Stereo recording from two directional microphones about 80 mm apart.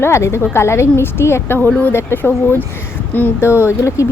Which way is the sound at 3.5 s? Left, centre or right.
Left.